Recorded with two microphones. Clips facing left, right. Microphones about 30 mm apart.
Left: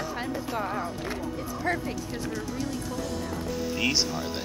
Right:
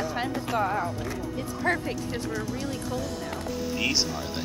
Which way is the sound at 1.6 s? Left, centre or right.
Right.